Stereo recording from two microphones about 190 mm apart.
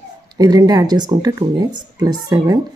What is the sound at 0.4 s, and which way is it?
Speech, 20° right (ahead or behind).